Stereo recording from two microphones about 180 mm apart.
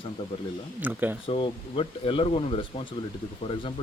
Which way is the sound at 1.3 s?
30° left (ahead or behind).